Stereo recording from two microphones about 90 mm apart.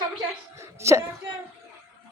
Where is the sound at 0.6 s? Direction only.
30° right (ahead or behind).